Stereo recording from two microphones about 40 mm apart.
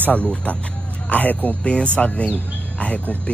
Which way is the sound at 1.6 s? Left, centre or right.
Left.